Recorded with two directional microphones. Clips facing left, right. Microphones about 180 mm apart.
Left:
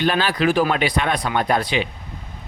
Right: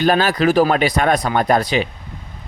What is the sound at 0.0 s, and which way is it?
Speech, 45° right (ahead or behind).